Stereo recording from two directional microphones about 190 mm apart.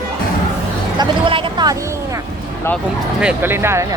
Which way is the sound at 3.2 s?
10° right (ahead or behind).